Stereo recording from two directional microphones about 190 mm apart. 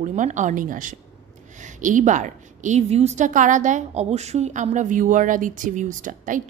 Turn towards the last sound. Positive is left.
turn(degrees=-45)  # may be behind; listen again after turning